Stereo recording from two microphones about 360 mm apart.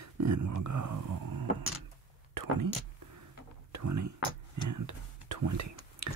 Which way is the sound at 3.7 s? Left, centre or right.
Right.